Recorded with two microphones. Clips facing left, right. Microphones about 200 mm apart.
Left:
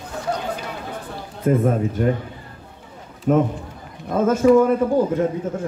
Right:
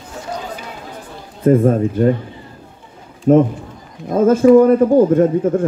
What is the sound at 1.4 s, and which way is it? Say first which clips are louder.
Speech: right 6 dB; 30° right (ahead or behind).